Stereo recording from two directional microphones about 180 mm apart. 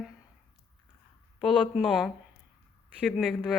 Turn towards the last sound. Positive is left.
turn(degrees=5)  # may be behind; listen again after turning